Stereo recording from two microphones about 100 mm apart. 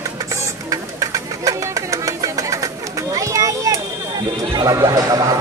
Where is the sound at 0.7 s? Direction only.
35° right (ahead or behind).